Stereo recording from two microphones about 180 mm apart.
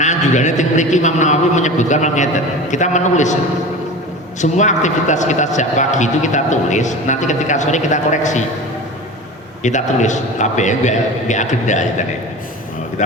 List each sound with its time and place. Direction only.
0.0 s a man's voice: 40° left (ahead or behind)
4.4 s a man's voice: 40° left (ahead or behind)
9.6 s a man's voice: 40° left (ahead or behind)